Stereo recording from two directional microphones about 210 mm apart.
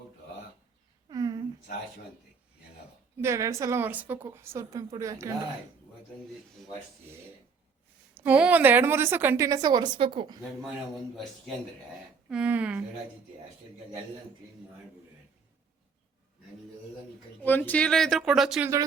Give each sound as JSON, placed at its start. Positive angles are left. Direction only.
{"t": 1.0, "sound": "a sound", "side_deg": -20}
{"t": 3.2, "sound": "a woman's voice", "side_deg": -15}
{"t": 8.1, "sound": "a woman's voice", "side_deg": -10}
{"t": 11.1, "sound": "a woman's voice", "side_deg": 0}
{"t": 17.4, "sound": "speech", "side_deg": 10}